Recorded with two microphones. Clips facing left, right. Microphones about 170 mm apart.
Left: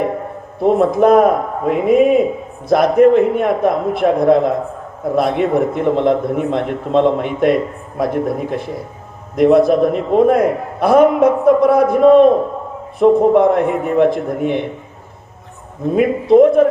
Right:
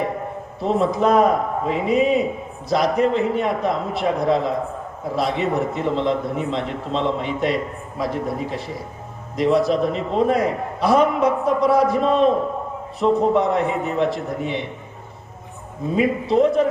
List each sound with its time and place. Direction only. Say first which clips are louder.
0.6 s a man's voice: left 7 dB; 55° left (ahead or behind)
16.0 s a man's voice: left 8 dB; 55° left (ahead or behind)